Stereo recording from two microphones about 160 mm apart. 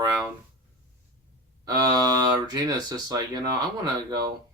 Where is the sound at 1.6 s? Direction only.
25° right (ahead or behind).